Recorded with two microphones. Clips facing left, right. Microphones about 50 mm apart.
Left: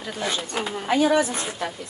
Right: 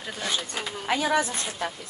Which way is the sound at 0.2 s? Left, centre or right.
Left.